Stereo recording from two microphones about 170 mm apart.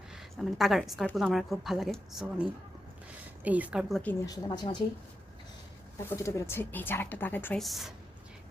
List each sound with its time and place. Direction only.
0.1 s a woman's voice: centre (ahead or behind)
4.3 s speech: 25° left (ahead or behind)
6.1 s speech: 15° left (ahead or behind)
7.6 s a woman's voice: centre (ahead or behind)